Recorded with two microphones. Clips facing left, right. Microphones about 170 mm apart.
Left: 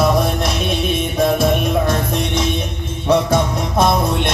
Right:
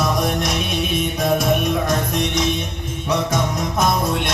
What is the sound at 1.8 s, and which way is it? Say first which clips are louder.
Music: left 2 dB; 30° left (ahead or behind).